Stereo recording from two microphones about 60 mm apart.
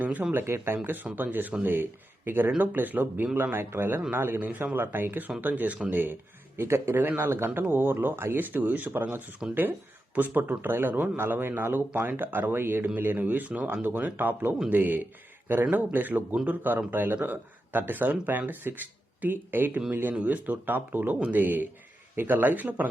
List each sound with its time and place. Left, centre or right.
0.0 s speech: right
0.4 s speech: right
6.6 s speech: right
6.9 s speech: right
7.2 s speech: right
9.4 s speech: centre
10.2 s speech: right
12.8 s speech: right
13.8 s speech: right